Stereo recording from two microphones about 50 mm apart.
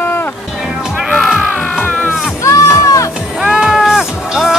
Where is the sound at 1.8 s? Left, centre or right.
Left.